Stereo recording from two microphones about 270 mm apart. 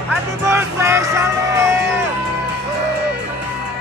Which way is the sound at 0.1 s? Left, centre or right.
Centre.